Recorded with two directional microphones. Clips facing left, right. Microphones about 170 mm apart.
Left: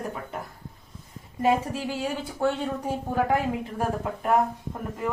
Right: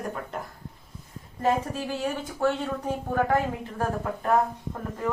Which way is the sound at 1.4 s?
15° left (ahead or behind).